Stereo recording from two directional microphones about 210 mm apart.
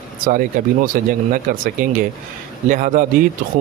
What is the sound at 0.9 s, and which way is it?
Speech, 45° right (ahead or behind).